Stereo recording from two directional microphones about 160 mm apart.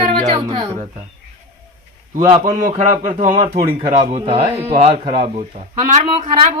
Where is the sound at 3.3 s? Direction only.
30° right (ahead or behind).